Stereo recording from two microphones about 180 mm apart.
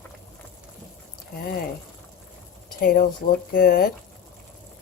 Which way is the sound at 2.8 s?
55° left (ahead or behind).